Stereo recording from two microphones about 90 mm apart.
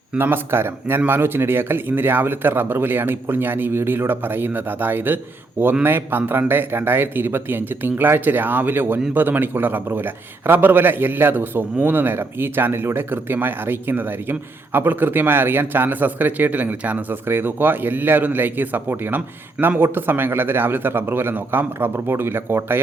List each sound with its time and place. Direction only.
0.2 s a man's voice: 25° right (ahead or behind)